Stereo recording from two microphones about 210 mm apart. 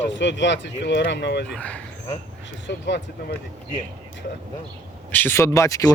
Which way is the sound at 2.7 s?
55° left (ahead or behind).